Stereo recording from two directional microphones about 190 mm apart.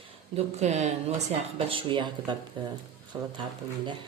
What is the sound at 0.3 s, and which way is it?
Speech, 35° right (ahead or behind).